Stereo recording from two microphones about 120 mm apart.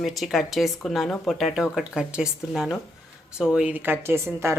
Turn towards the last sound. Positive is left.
turn(degrees=-20)  # may be behind; listen again after turning